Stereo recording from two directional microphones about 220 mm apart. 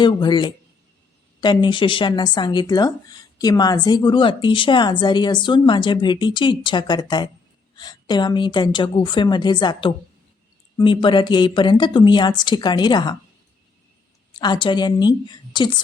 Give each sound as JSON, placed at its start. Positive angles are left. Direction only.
{"t": 0.0, "sound": "a woman's voice", "side_deg": 20}
{"t": 14.3, "sound": "speech", "side_deg": 20}